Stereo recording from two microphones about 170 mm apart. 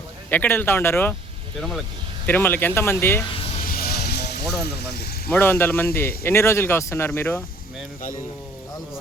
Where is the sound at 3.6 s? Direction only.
60° left (ahead or behind).